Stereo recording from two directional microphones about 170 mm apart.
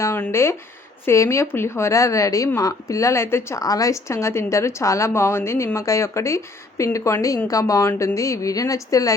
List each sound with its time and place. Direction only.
0.0 s speech: 15° left (ahead or behind)